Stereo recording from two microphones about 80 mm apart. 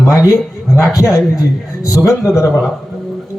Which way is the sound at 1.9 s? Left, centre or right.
Left.